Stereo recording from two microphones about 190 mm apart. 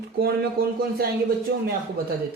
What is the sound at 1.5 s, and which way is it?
Speech, 60° right (ahead or behind).